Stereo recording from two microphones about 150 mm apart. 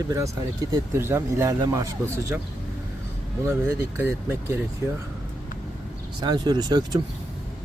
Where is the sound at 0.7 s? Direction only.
15° right (ahead or behind).